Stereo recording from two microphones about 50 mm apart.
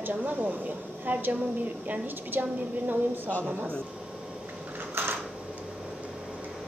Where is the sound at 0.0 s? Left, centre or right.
Right.